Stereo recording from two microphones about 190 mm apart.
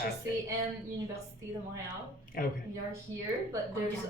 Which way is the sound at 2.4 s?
50° left (ahead or behind).